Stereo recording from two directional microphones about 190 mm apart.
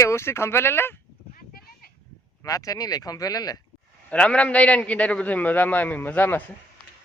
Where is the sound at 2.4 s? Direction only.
20° left (ahead or behind).